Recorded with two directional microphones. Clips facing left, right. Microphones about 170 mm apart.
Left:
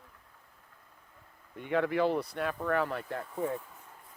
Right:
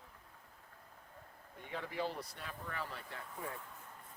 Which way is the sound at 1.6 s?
70° left (ahead or behind).